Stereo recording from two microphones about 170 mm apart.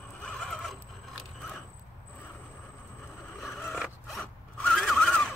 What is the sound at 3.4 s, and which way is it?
Zipper, centre (ahead or behind).